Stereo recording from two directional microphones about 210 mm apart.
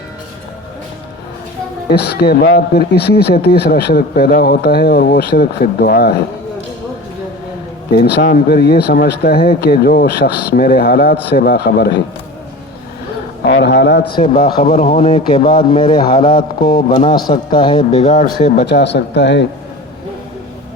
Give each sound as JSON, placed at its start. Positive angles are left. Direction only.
{"t": 1.9, "sound": "speech", "side_deg": 50}
{"t": 7.9, "sound": "speech", "side_deg": 50}
{"t": 13.4, "sound": "speech", "side_deg": 50}
{"t": 14.6, "sound": "speech", "side_deg": 30}
{"t": 18.5, "sound": "speech", "side_deg": 50}